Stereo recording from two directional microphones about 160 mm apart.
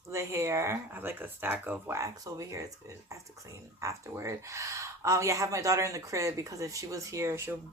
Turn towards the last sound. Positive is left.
turn(degrees=-20)  # may be behind; listen again after turning